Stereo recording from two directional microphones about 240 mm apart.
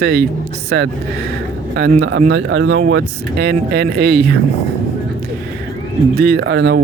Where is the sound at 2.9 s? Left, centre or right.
Right.